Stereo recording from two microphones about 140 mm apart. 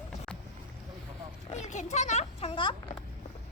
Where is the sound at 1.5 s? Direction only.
55° left (ahead or behind); by 2.7 s 40° left (ahead or behind).